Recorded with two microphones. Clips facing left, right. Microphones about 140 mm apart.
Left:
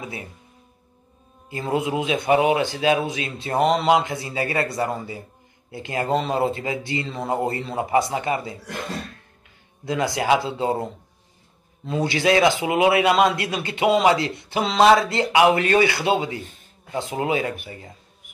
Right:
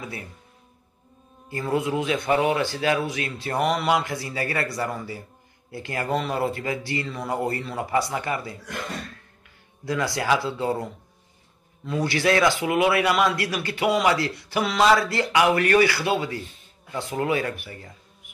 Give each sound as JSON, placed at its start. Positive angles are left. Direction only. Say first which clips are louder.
{"t": 0.0, "sound": "a man's voice", "louder": "left 2 dB", "side_deg": 20}
{"t": 1.5, "sound": "a man's voice", "louder": "left 1 dB", "side_deg": 20}
{"t": 9.8, "sound": "a man's voice", "louder": "left 3 dB", "side_deg": 20}